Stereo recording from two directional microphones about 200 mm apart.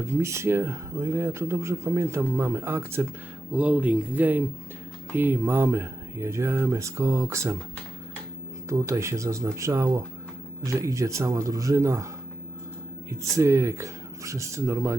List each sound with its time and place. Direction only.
0.0 s speech: 15° right (ahead or behind)
8.7 s speech: 15° right (ahead or behind)
13.1 s speech: 15° right (ahead or behind)